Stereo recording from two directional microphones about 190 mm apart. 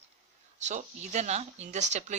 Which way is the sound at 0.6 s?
35° right (ahead or behind).